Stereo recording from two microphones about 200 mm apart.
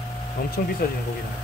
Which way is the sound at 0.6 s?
45° left (ahead or behind).